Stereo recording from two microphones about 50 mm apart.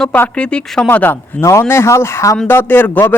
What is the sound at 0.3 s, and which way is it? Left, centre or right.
Speech, centre.